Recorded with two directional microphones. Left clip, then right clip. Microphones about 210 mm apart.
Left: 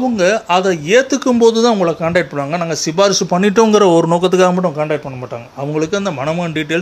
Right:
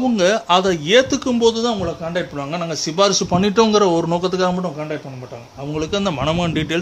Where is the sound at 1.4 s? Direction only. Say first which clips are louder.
Left 6 dB; 20° left (ahead or behind).